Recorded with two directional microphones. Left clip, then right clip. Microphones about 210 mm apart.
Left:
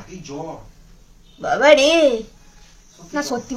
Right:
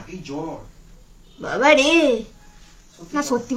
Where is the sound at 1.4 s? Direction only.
Centre (ahead or behind).